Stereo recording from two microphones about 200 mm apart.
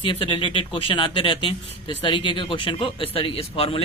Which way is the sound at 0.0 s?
25° left (ahead or behind).